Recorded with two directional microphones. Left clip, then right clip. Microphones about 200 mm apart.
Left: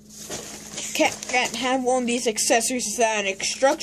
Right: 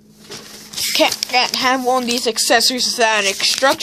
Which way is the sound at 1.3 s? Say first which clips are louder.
Right 8 dB; 10° right (ahead or behind).